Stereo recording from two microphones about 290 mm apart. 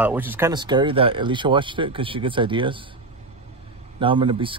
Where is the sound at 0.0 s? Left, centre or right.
Centre.